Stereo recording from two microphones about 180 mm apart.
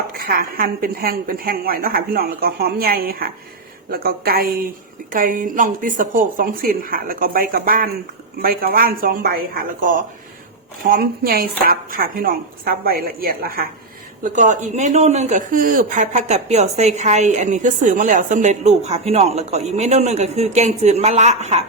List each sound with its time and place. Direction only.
0.1 s a woman's voice: 55° right (ahead or behind)
14.3 s speech: 45° right (ahead or behind)